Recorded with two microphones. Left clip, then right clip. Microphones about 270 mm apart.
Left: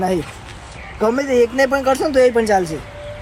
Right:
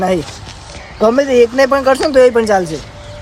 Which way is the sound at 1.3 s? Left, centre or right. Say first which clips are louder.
Right 5 dB; centre.